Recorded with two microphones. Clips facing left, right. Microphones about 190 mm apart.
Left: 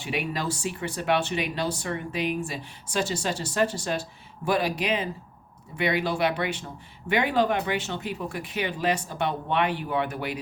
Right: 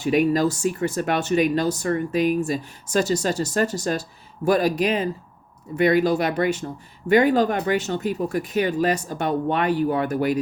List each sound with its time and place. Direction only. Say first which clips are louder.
0.0 s speech: right 11 dB; 40° right (ahead or behind)